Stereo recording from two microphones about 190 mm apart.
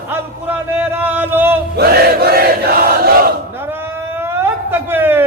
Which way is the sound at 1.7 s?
55° right (ahead or behind).